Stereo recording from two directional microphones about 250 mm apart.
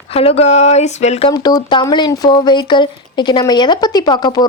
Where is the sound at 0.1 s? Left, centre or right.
Left.